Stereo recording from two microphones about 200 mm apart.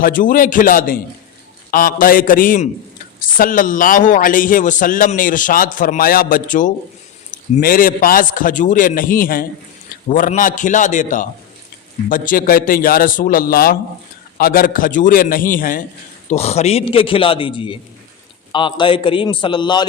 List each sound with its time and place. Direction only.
0.0 s a man's voice: 40° left (ahead or behind)
16.3 s a man's voice: 30° left (ahead or behind)